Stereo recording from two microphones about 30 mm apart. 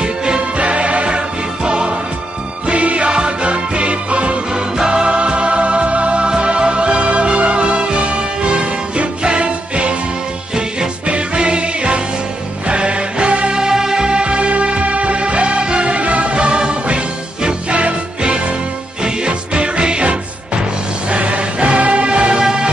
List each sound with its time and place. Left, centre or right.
0.0 s music: right
0.6 s music: right
2.6 s music: right
3.1 s music: right
3.4 s music: right
4.5 s music: right
5.0 s music: right
11.1 s music: right
13.5 s music: right
21.1 s music: right